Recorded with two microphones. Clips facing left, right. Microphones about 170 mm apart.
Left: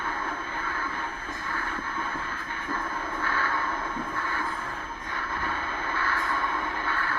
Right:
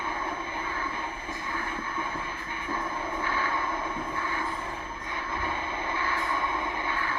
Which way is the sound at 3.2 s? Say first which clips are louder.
Left 2 dB; 15° right (ahead or behind).